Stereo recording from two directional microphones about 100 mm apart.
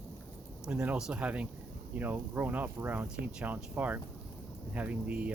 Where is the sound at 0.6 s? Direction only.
10° right (ahead or behind).